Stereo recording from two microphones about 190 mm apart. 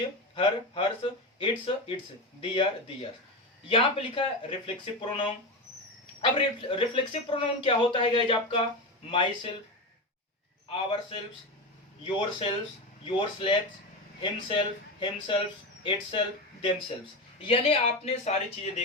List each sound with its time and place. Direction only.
0.3 s speech: 30° left (ahead or behind)
6.3 s speech: 25° left (ahead or behind)
10.7 s speech: 30° left (ahead or behind)